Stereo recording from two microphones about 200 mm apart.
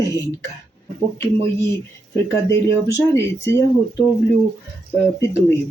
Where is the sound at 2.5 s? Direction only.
15° left (ahead or behind).